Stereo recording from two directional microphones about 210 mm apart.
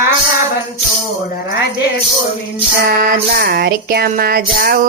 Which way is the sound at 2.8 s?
45° right (ahead or behind).